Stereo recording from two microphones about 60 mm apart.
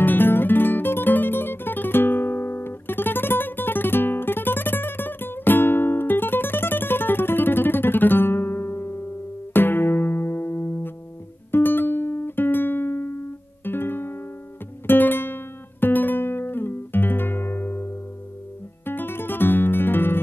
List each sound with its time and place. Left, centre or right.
0.0 s guitar: left
9.5 s music: left
14.9 s guitar: left
18.9 s music: left